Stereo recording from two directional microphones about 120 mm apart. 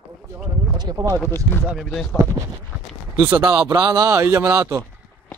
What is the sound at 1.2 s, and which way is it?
Speech, 20° left (ahead or behind).